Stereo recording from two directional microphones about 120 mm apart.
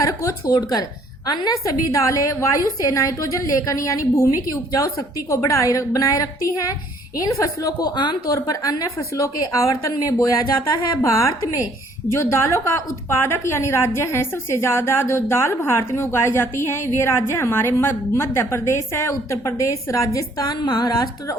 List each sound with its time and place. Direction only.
0.0 s a woman's voice: 25° left (ahead or behind)